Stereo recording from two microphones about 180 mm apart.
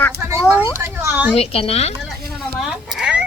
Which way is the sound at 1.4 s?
35° left (ahead or behind).